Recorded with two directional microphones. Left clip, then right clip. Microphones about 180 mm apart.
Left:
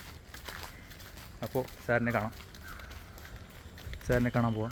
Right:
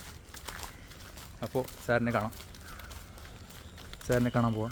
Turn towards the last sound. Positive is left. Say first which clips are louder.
# right 1 dB
turn(degrees=-15)  # may be behind; listen again after turning